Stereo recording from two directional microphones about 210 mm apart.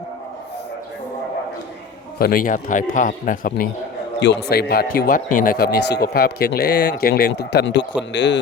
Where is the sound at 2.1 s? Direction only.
45° left (ahead or behind).